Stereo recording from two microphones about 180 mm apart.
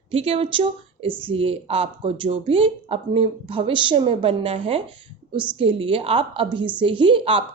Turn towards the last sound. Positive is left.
turn(degrees=-30)  # may be behind; listen again after turning